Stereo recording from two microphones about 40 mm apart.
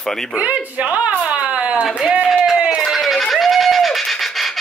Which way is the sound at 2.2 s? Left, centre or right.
Centre.